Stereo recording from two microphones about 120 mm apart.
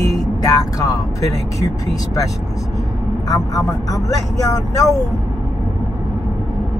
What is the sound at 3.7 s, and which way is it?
Speech, 30° left (ahead or behind).